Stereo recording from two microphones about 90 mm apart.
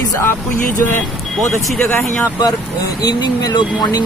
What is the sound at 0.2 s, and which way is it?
Speech, 20° left (ahead or behind).